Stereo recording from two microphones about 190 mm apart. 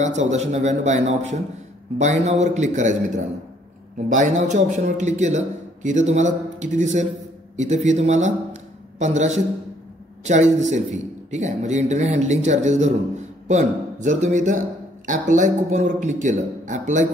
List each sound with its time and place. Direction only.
0.0 s a man's voice: 35° right (ahead or behind)
4.1 s a man's voice: 40° right (ahead or behind)